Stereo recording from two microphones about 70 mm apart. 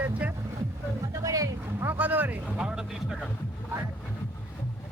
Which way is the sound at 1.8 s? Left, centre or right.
Right.